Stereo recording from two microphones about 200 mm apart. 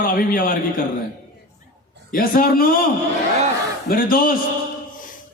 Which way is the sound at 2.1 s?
45° left (ahead or behind).